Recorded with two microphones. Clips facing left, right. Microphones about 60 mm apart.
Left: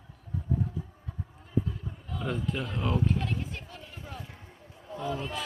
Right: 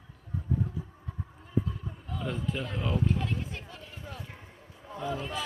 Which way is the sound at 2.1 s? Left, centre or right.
Centre.